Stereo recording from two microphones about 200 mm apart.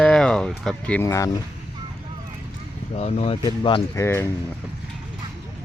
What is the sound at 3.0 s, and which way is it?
Speech, 30° left (ahead or behind).